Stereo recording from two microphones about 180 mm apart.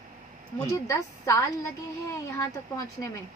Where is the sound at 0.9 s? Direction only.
15° left (ahead or behind).